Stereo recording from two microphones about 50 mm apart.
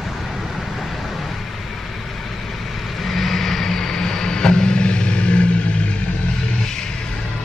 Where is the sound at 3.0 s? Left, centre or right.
Centre; by 5.9 s left.